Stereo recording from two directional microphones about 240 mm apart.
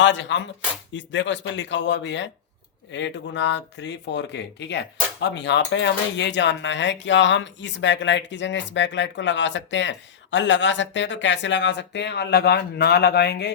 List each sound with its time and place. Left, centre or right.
0.0 s speech: left